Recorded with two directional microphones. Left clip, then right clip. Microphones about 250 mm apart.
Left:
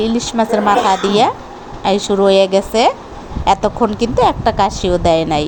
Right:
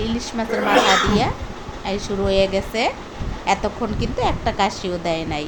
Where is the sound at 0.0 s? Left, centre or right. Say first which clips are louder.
Left 9 dB; centre.